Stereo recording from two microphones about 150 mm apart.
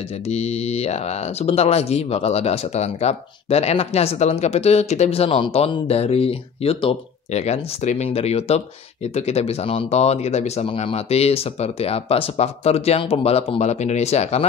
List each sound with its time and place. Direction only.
0.3 s speech: 45° left (ahead or behind)